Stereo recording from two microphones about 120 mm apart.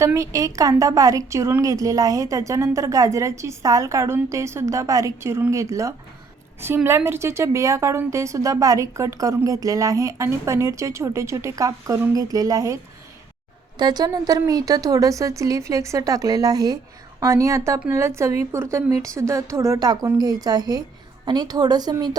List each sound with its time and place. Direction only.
0.0 s a woman's voice: 25° right (ahead or behind)